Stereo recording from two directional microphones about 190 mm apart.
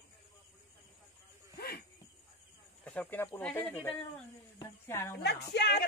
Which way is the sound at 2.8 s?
10° left (ahead or behind).